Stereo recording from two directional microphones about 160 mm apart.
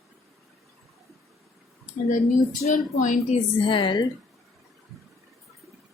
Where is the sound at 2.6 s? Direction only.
50° left (ahead or behind).